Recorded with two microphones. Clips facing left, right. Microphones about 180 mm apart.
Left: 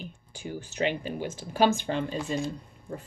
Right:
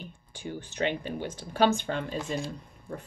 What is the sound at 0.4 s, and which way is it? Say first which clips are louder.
Speech: left 1 dB; 10° left (ahead or behind).